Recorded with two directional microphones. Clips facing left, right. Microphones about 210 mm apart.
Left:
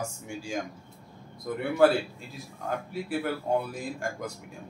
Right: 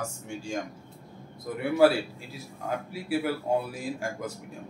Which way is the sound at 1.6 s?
5° right (ahead or behind).